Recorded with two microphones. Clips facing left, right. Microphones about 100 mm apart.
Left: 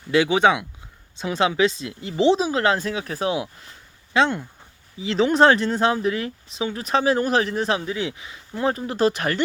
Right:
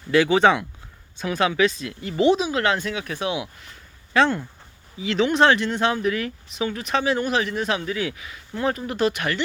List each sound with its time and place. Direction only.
0.1 s speech: 15° left (ahead or behind)
1.1 s speech: 25° left (ahead or behind)
4.9 s speech: 30° left (ahead or behind)